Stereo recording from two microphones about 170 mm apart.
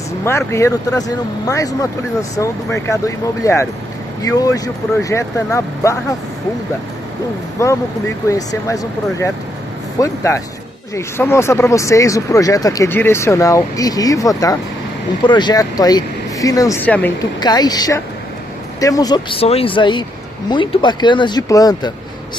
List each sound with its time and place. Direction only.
0.2 s speech: 15° left (ahead or behind)
7.6 s speech: 20° left (ahead or behind)
16.8 s speech: 10° left (ahead or behind)
17.2 s speech: 25° left (ahead or behind)